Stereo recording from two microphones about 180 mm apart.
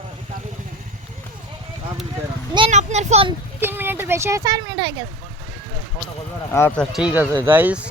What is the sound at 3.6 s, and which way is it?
Speech, 10° right (ahead or behind).